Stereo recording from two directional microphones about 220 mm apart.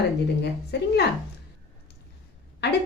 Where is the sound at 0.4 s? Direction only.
50° left (ahead or behind).